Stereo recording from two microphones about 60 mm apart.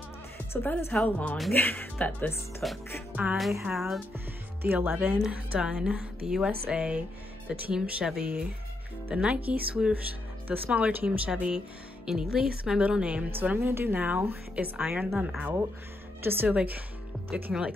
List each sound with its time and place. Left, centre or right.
0.6 s a woman's voice: left
1.0 s speech: left
2.6 s speech: centre
3.1 s speech: right
3.7 s speech: centre
4.6 s speech: right
5.3 s a woman's voice: centre
10.7 s speech: right
12.1 s a woman's voice: centre
13.3 s speech: right
16.2 s speech: right
16.5 s speech: right